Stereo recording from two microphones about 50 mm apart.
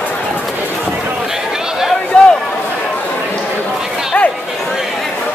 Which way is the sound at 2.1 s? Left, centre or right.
Left.